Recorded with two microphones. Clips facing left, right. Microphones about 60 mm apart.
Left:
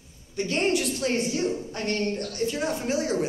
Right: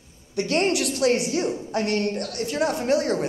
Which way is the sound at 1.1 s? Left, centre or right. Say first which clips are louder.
Right 3 dB; centre.